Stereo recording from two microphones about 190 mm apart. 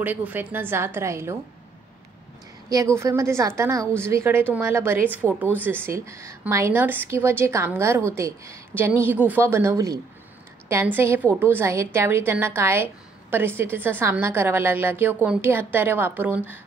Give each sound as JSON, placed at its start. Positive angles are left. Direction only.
{"t": 0.0, "sound": "a woman's voice", "side_deg": -10}
{"t": 2.7, "sound": "a woman's voice", "side_deg": -15}